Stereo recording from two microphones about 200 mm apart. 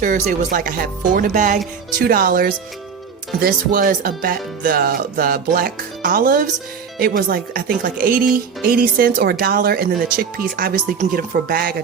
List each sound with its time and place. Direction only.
0.0 s speech: 40° right (ahead or behind)